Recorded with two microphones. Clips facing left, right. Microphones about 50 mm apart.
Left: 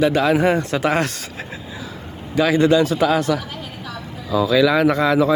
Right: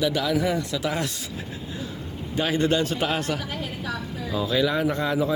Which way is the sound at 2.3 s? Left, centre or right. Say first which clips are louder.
Left 8 dB; left.